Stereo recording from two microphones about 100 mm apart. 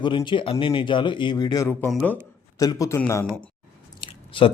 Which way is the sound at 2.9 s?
25° left (ahead or behind).